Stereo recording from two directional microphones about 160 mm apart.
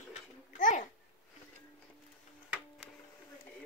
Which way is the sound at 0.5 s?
50° left (ahead or behind).